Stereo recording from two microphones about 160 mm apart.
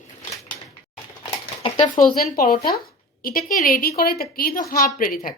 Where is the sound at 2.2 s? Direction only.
65° left (ahead or behind).